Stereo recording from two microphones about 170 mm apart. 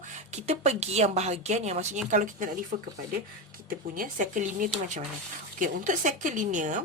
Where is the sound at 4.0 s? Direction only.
50° right (ahead or behind).